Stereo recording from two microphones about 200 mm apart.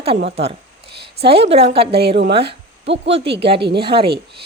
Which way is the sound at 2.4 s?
65° right (ahead or behind).